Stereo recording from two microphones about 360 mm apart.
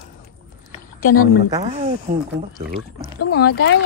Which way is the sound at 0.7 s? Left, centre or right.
Left.